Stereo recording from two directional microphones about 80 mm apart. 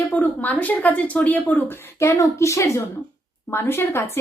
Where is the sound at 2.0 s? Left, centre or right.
Left.